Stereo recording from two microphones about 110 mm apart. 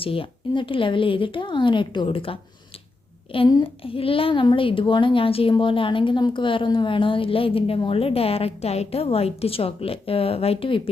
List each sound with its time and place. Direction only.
0.0 s speech: 55° left (ahead or behind)
3.6 s a child's voice: 55° left (ahead or behind)